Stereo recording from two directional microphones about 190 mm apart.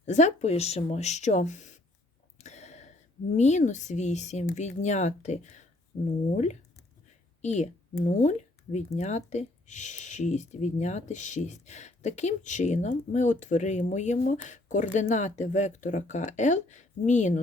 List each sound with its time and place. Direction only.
0.0 s speech: 40° left (ahead or behind)
2.4 s a sound: 35° left (ahead or behind)
3.3 s speech: 35° left (ahead or behind)